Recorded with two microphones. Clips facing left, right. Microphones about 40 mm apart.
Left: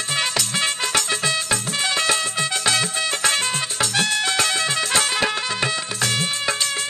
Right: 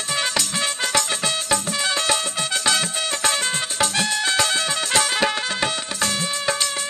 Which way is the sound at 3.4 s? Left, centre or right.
Right.